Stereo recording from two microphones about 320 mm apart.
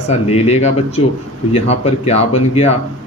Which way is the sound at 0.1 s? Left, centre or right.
Centre.